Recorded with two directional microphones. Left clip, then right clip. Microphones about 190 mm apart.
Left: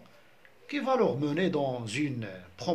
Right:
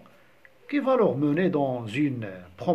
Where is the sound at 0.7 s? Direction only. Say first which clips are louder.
Right 4 dB; 25° right (ahead or behind).